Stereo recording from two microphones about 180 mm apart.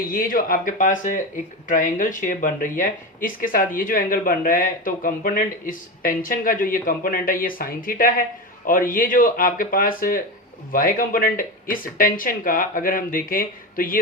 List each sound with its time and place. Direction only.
0.0 s speech: 55° left (ahead or behind)